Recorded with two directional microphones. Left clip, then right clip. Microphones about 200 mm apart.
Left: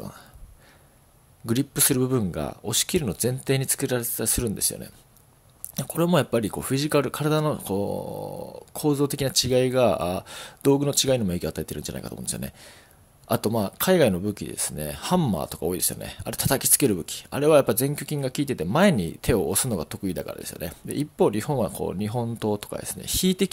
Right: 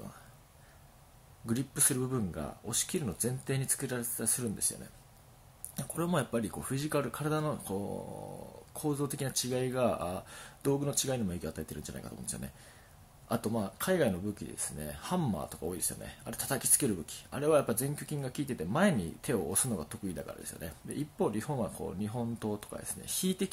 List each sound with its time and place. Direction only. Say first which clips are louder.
1.4 s speech: left 10 dB; 40° left (ahead or behind)
5.8 s speech: left 11 dB; 40° left (ahead or behind)